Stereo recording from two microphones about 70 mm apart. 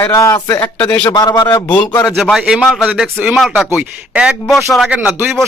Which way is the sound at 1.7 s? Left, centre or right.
Left.